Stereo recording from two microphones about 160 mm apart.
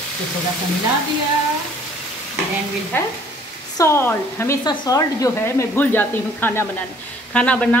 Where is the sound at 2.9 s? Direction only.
15° left (ahead or behind).